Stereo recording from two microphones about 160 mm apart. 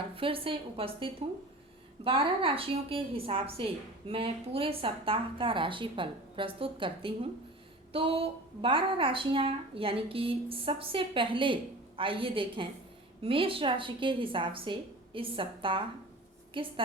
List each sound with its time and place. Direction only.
0.2 s a woman's voice: 35° right (ahead or behind)